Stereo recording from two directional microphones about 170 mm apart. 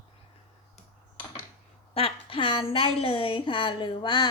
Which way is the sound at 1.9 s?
35° left (ahead or behind).